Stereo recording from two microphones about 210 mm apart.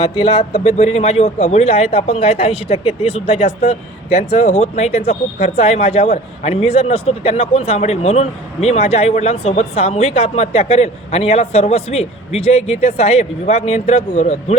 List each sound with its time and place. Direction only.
0.0 s speech: 25° left (ahead or behind)